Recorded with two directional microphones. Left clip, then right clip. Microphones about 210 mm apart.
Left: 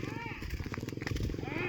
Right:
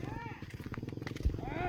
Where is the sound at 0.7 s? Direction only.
50° left (ahead or behind).